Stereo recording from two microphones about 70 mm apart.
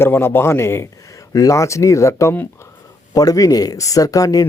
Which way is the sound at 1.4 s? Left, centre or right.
Left.